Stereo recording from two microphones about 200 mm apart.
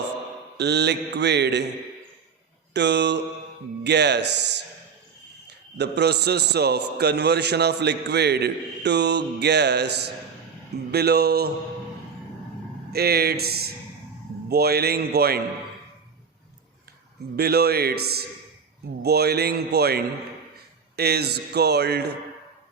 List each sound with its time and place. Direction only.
0.5 s a man's voice: 55° right (ahead or behind)
2.7 s a man's voice: 60° right (ahead or behind)
12.9 s a man's voice: 50° right (ahead or behind)
17.3 s a man's voice: 50° right (ahead or behind)